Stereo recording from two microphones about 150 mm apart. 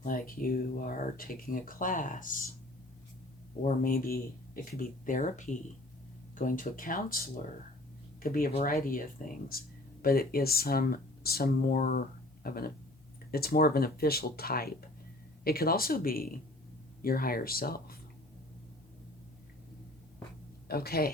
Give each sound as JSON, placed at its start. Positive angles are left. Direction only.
{"t": 0.0, "sound": "speech", "side_deg": 70}
{"t": 3.6, "sound": "speech", "side_deg": 70}
{"t": 8.2, "sound": "speech", "side_deg": 70}
{"t": 20.7, "sound": "speech", "side_deg": 90}